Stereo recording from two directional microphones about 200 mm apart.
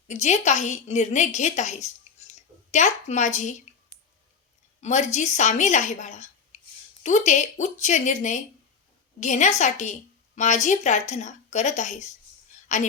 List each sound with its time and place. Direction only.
0.1 s a woman's voice: 35° left (ahead or behind)
4.8 s a woman's voice: 35° left (ahead or behind)